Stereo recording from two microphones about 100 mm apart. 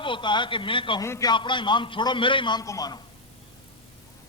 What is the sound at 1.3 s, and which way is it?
A man's voice, 55° left (ahead or behind).